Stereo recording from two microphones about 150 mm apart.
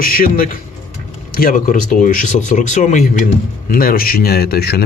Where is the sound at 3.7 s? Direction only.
75° left (ahead or behind); by 4.8 s 90° left.